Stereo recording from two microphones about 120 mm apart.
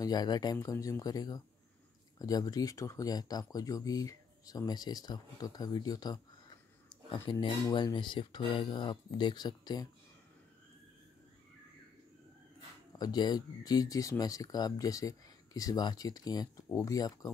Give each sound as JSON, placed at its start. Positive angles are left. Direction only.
{"t": 0.0, "sound": "speech", "side_deg": 35}
{"t": 7.2, "sound": "speech", "side_deg": 40}
{"t": 13.0, "sound": "speech", "side_deg": 35}